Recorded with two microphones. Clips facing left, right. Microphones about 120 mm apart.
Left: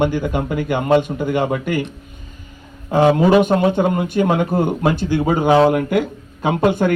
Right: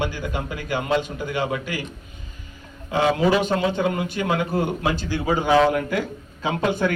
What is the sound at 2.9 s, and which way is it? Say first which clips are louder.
A man's voice: left 6 dB; 45° left (ahead or behind).